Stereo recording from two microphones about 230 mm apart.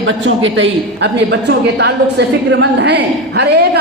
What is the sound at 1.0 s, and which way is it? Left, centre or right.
A woman's voice, right.